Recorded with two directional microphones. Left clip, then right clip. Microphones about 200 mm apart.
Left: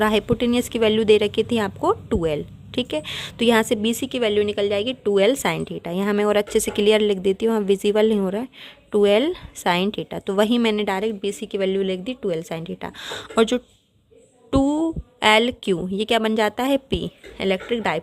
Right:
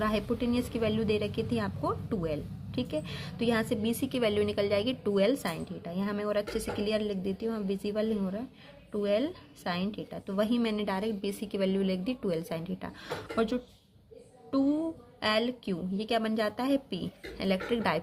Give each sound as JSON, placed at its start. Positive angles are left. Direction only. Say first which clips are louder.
{"t": 0.0, "sound": "a woman's voice", "louder": "left 11 dB", "side_deg": 40}